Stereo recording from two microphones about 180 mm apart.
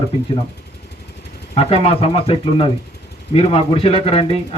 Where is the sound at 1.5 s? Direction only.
35° left (ahead or behind).